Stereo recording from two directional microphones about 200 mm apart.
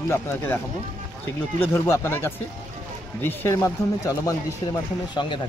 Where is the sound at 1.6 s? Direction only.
10° left (ahead or behind).